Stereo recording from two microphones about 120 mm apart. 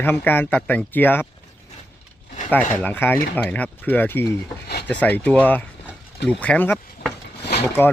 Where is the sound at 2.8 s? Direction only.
15° left (ahead or behind).